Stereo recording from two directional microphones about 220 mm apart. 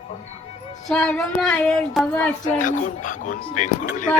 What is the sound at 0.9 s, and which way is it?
Music, 5° left (ahead or behind).